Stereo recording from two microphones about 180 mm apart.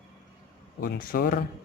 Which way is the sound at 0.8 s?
55° left (ahead or behind).